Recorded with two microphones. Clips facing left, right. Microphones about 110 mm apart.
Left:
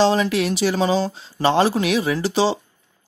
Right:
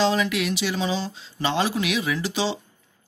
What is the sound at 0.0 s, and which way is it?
Speech, 35° left (ahead or behind).